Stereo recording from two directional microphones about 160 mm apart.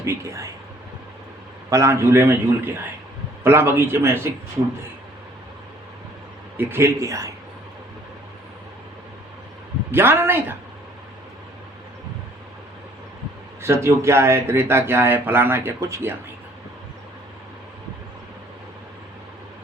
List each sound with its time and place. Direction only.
0.0 s speech: 20° right (ahead or behind)
1.7 s speech: 20° right (ahead or behind)
6.6 s speech: 15° right (ahead or behind)
9.9 s speech: 15° right (ahead or behind)
13.6 s speech: 15° right (ahead or behind)